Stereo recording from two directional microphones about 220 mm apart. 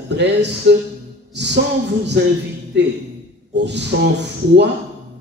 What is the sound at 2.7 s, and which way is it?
Speech, 50° right (ahead or behind).